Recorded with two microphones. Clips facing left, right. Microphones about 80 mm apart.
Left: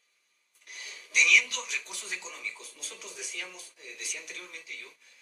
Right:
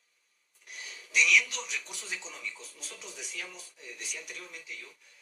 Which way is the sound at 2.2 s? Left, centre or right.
Left.